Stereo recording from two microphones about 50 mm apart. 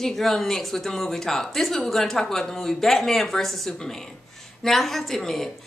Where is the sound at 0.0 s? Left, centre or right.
Centre.